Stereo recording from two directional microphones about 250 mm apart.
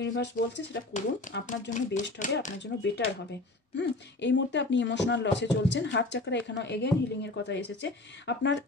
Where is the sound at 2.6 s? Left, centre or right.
Left.